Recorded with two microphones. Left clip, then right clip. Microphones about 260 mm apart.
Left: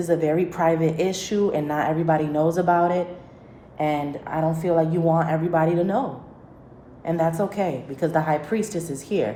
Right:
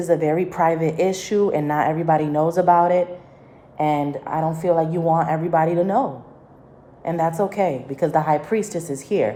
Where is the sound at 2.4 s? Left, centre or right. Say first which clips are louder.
Right 4 dB; right.